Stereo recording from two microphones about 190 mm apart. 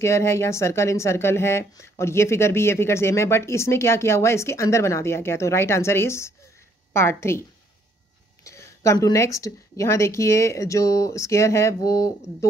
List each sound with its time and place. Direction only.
0.0 s speech: 15° left (ahead or behind)
8.5 s speech: 15° left (ahead or behind)